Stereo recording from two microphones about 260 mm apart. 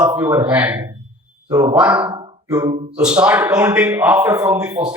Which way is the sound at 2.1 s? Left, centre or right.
Centre.